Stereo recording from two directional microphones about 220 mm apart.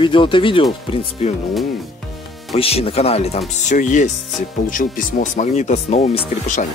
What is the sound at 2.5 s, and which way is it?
Speech, 25° left (ahead or behind).